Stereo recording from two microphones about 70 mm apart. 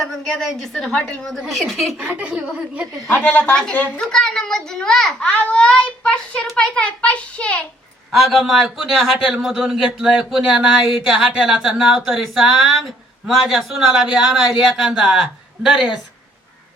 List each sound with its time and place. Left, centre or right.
0.3 s speech: centre
2.0 s speech: centre
3.1 s speech: left
4.0 s a child's voice: centre
8.1 s speech: centre